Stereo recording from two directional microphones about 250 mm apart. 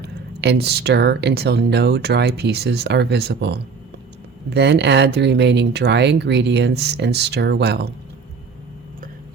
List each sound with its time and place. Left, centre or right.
0.0 s speech: right